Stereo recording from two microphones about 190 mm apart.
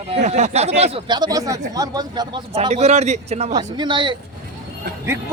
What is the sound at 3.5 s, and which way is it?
Speech, 25° right (ahead or behind).